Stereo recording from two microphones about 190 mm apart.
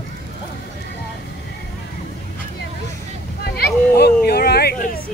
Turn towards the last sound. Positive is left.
turn(degrees=55)  # may be behind; listen again after turning